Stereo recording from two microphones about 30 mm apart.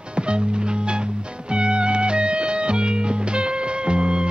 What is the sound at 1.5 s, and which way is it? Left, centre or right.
Music, right.